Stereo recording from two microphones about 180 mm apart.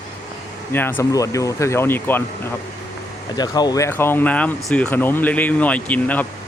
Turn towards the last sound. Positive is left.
turn(degrees=10)  # may be behind; listen again after turning